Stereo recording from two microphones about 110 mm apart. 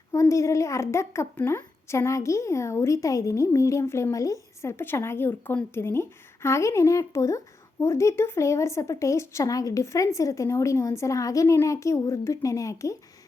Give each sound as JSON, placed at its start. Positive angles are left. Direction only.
{"t": 0.1, "sound": "speech", "side_deg": 30}